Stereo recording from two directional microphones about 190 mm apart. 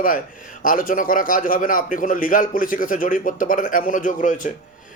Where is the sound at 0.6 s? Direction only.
45° left (ahead or behind).